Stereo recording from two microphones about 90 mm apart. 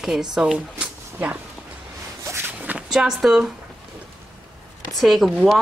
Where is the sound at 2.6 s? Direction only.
15° right (ahead or behind).